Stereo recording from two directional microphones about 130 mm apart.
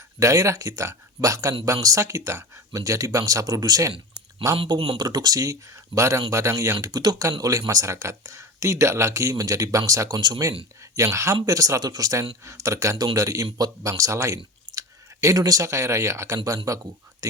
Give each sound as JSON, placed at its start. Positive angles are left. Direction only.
{"t": 0.2, "sound": "speech", "side_deg": -25}
{"t": 4.5, "sound": "speech", "side_deg": -45}